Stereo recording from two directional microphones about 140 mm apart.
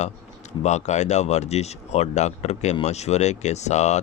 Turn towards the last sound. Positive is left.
turn(degrees=55)  # may be behind; listen again after turning